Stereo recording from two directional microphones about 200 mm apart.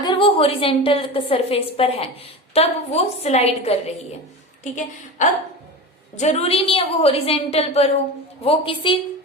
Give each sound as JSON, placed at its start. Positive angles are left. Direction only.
{"t": 0.0, "sound": "a woman's voice", "side_deg": 25}